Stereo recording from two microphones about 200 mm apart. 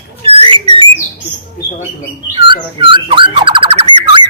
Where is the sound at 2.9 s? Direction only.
25° right (ahead or behind).